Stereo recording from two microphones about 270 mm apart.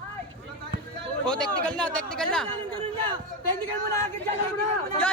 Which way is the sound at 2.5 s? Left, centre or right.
Centre.